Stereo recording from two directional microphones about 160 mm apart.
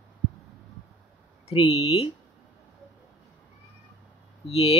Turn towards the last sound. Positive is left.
turn(degrees=40)  # may be behind; listen again after turning